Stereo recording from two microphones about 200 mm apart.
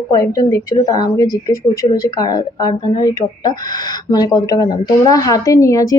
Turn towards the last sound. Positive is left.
turn(degrees=15)  # may be behind; listen again after turning